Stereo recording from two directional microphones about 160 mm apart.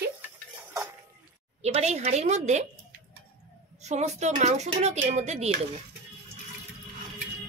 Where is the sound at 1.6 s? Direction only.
45° right (ahead or behind).